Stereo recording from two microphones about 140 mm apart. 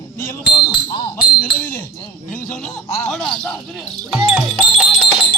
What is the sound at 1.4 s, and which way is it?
Speech, 10° left (ahead or behind).